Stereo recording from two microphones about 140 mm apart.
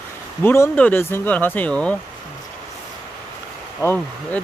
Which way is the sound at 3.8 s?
10° left (ahead or behind).